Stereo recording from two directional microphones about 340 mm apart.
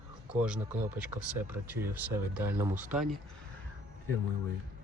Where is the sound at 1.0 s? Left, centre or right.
Centre.